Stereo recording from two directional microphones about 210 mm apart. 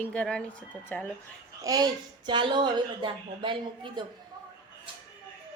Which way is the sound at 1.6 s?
20° right (ahead or behind).